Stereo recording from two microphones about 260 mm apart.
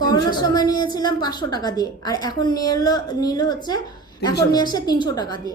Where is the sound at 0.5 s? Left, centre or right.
Centre.